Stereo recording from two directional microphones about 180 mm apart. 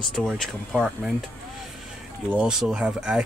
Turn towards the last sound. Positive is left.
turn(degrees=-5)  # may be behind; listen again after turning